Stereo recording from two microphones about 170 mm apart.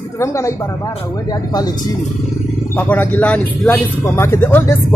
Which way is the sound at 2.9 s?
10° left (ahead or behind).